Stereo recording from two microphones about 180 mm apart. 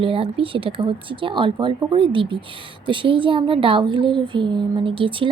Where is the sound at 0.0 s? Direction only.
30° right (ahead or behind).